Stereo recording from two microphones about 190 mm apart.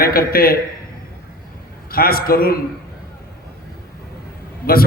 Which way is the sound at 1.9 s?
50° left (ahead or behind).